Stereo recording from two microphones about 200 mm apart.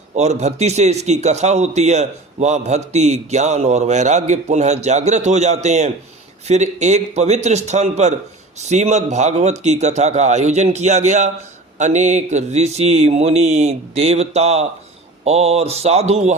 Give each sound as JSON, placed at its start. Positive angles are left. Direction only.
{"t": 0.1, "sound": "speech", "side_deg": -35}